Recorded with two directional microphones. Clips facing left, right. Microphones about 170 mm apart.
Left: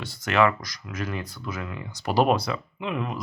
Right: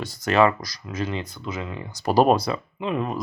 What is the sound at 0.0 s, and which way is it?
Speech, 40° right (ahead or behind).